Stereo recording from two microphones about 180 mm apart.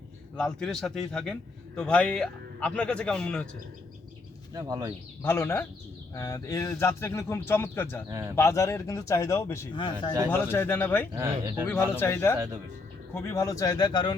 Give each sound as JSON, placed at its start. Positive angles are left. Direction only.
{"t": 0.3, "sound": "a man's voice", "side_deg": 5}
{"t": 4.5, "sound": "speech", "side_deg": -20}
{"t": 5.2, "sound": "speech", "side_deg": 10}
{"t": 8.1, "sound": "speech", "side_deg": -15}
{"t": 8.4, "sound": "speech", "side_deg": 15}
{"t": 9.7, "sound": "speech", "side_deg": 25}
{"t": 10.2, "sound": "speech", "side_deg": 10}
{"t": 11.1, "sound": "speech", "side_deg": -15}
{"t": 11.9, "sound": "speech", "side_deg": 15}